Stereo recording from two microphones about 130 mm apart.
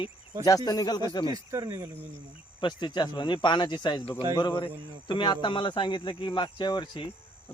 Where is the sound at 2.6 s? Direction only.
35° left (ahead or behind).